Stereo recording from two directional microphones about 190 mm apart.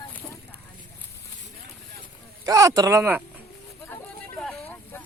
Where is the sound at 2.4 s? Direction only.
20° right (ahead or behind).